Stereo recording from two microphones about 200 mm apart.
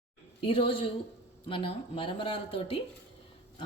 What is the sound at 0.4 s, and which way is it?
Speech, 25° left (ahead or behind).